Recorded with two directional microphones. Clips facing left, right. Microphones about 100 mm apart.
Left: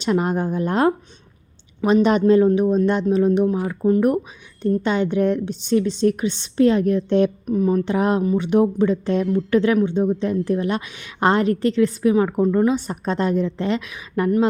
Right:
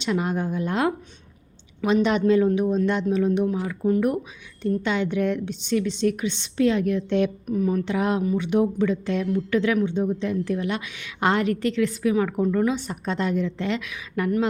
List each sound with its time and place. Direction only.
0.0 s a woman's voice: 45° left (ahead or behind)